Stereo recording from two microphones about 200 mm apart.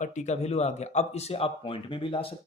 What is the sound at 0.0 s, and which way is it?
Speech, 35° left (ahead or behind).